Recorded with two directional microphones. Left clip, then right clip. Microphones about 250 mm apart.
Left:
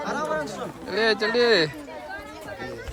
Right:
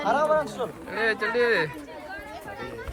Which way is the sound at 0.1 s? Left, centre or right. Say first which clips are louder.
Right 7 dB; centre.